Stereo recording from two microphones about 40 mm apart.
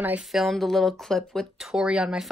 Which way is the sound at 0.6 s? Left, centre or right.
Centre.